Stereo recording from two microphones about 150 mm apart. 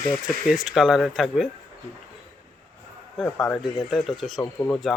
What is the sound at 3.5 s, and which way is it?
Speech, 5° left (ahead or behind).